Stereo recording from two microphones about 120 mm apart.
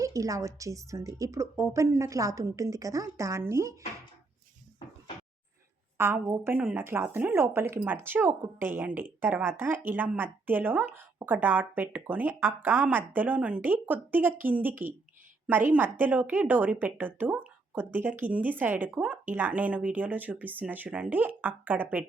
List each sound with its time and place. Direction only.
0.0 s a woman's voice: 25° right (ahead or behind)
6.0 s speech: 20° right (ahead or behind)